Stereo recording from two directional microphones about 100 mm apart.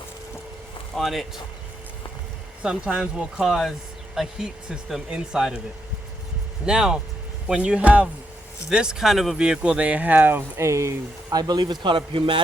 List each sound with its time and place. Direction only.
0.9 s speech: centre (ahead or behind)
2.6 s speech: 10° right (ahead or behind)
6.7 s speech: 5° right (ahead or behind); by 12.4 s 60° right (ahead or behind)